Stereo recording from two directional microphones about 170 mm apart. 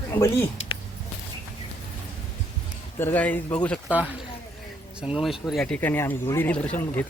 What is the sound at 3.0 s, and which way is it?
Speech, 10° left (ahead or behind).